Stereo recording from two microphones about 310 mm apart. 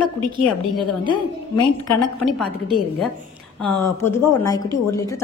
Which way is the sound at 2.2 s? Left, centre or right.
Centre.